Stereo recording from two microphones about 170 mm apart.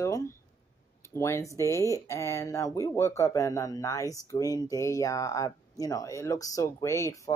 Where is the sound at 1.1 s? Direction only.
15° left (ahead or behind).